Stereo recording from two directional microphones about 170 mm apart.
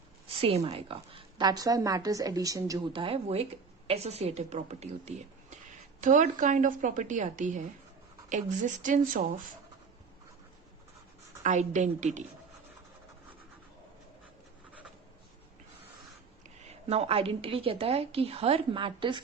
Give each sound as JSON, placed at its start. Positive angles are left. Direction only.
{"t": 0.4, "sound": "a woman's voice", "side_deg": -35}
{"t": 11.4, "sound": "a woman's voice", "side_deg": -45}
{"t": 16.6, "sound": "a woman's voice", "side_deg": -40}